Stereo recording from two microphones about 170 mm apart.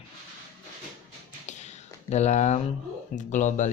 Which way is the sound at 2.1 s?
40° left (ahead or behind).